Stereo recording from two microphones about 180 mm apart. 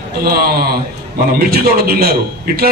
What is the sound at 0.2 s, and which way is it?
A man's voice, 55° right (ahead or behind).